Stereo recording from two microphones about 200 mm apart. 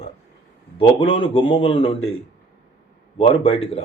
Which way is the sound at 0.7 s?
25° left (ahead or behind).